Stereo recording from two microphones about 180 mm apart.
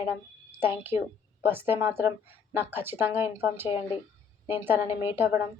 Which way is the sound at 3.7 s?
30° left (ahead or behind).